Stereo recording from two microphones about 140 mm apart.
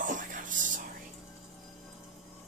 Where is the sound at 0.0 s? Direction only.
70° right (ahead or behind).